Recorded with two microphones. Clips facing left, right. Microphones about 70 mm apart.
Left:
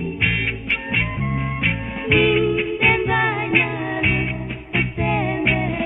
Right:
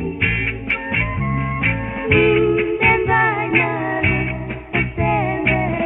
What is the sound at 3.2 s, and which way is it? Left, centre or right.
Music, centre.